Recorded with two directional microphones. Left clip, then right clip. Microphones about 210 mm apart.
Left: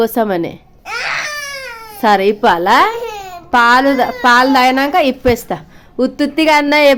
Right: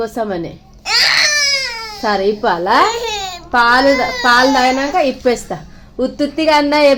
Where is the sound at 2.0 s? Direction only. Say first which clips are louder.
Left 4 dB; 30° left (ahead or behind).